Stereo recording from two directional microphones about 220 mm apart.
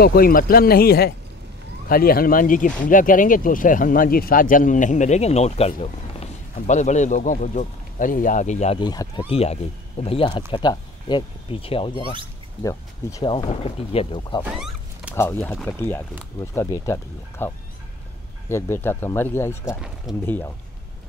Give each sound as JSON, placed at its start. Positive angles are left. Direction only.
{"t": 0.0, "sound": "speech", "side_deg": 45}
{"t": 8.8, "sound": "speech", "side_deg": 15}
{"t": 9.3, "sound": "speech", "side_deg": 30}
{"t": 13.2, "sound": "speech", "side_deg": 25}
{"t": 14.4, "sound": "a sound", "side_deg": -5}
{"t": 15.1, "sound": "speech", "side_deg": 10}
{"t": 18.5, "sound": "speech", "side_deg": 10}
{"t": 20.1, "sound": "speech", "side_deg": 0}